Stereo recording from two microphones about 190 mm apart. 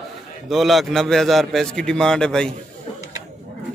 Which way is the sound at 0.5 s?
Centre (ahead or behind).